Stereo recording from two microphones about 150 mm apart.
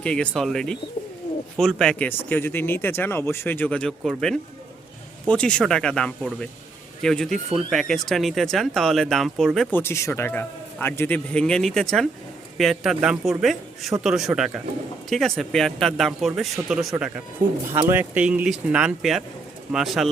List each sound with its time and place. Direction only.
0.0 s speech: 5° left (ahead or behind)
9.7 s a woman's voice: 15° left (ahead or behind); by 16.9 s centre (ahead or behind)
17.4 s speech: 15° right (ahead or behind); by 20.1 s centre (ahead or behind)